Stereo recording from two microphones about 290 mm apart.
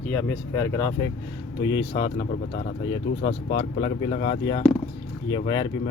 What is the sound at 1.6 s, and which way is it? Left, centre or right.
Speech, left.